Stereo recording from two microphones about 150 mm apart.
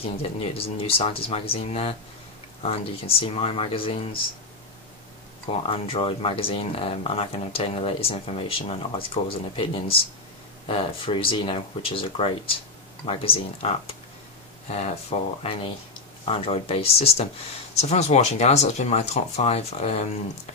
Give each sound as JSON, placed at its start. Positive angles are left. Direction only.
{"t": 0.0, "sound": "speech", "side_deg": 40}
{"t": 5.6, "sound": "speech", "side_deg": 35}